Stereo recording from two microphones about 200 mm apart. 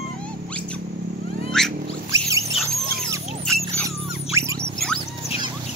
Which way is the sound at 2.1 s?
15° right (ahead or behind).